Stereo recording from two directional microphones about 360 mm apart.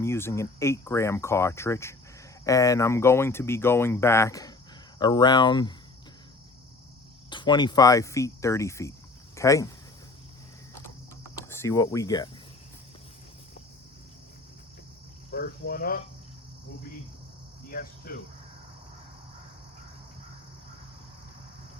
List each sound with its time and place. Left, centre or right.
0.0 s speech: centre
7.3 s speech: centre
11.3 s speech: centre
15.3 s speech: left
17.7 s speech: left